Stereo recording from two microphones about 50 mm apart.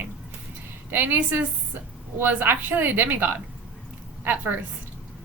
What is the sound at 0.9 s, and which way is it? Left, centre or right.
A woman's voice, right.